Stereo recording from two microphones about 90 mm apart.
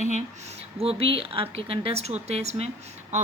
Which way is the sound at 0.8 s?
90° right.